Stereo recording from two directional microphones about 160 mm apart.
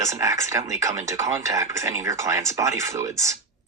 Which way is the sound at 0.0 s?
20° right (ahead or behind).